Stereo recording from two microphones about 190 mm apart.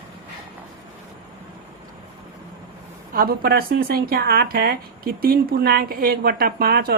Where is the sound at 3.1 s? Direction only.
50° right (ahead or behind).